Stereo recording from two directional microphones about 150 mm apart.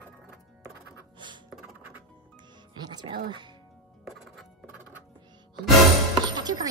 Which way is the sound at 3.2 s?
30° right (ahead or behind).